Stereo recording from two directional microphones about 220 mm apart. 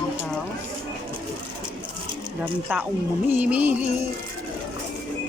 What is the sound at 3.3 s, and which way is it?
Music, 5° right (ahead or behind).